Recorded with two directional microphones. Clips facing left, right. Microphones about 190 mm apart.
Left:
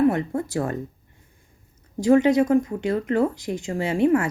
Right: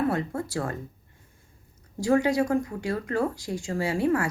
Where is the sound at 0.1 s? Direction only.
20° left (ahead or behind).